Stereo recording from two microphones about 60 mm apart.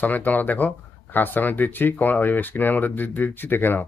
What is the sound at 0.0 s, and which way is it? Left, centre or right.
Speech, left.